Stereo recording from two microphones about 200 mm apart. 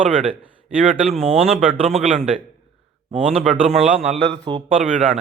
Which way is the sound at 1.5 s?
5° right (ahead or behind).